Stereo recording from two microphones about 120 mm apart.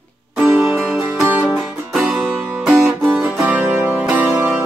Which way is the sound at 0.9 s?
5° right (ahead or behind).